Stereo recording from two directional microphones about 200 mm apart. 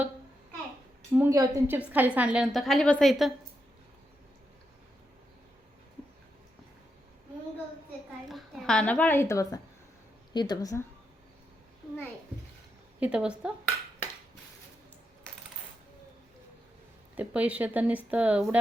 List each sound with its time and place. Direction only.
1.1 s a woman's voice: 10° right (ahead or behind)
8.3 s a sound: centre (ahead or behind); by 9.6 s 15° left (ahead or behind)
10.3 s speech: 20° left (ahead or behind)
13.0 s a woman's voice: 5° right (ahead or behind)
17.2 s speech: 5° right (ahead or behind)